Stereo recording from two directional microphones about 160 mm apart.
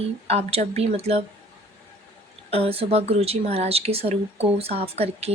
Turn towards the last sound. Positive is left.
turn(degrees=-40)  # may be behind; listen again after turning